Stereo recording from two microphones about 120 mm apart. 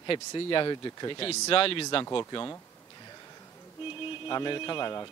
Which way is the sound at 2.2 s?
30° left (ahead or behind).